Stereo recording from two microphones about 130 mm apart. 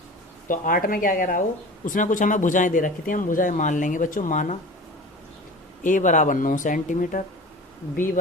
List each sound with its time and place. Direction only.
0.4 s speech: 90° left; by 4.5 s 70° left (ahead or behind)
5.8 s speech: 80° left